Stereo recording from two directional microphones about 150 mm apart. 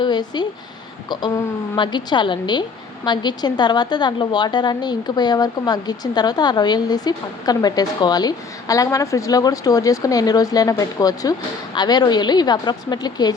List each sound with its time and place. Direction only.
0.0 s a woman's voice: 30° left (ahead or behind)